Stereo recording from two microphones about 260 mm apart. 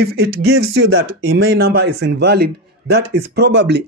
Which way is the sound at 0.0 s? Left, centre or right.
Right.